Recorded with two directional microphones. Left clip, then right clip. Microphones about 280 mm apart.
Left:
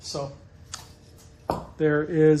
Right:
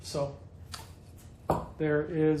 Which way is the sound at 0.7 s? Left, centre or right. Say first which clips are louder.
Left 4 dB; left.